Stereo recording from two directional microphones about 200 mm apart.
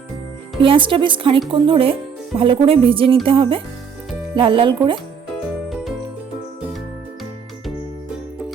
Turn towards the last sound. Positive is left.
turn(degrees=0)  # may be behind; listen again after turning